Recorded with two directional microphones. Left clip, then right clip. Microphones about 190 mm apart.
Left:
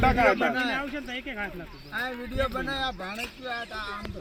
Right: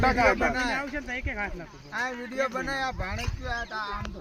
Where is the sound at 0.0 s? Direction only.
40° left (ahead or behind); by 4.0 s 15° left (ahead or behind).